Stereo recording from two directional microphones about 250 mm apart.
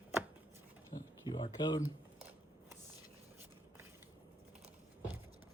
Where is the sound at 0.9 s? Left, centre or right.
Left.